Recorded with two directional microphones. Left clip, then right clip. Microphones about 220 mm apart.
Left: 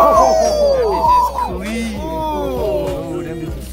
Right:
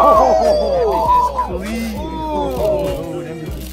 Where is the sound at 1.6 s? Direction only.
15° left (ahead or behind).